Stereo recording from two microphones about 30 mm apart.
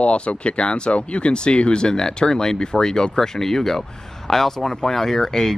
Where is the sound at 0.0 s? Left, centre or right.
Left.